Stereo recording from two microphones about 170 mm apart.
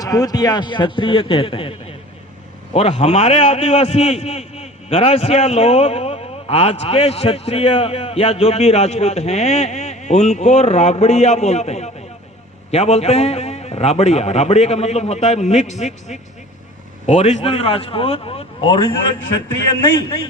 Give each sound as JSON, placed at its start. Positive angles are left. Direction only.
{"t": 0.0, "sound": "a man's voice", "side_deg": 20}
{"t": 2.7, "sound": "a man's voice", "side_deg": 35}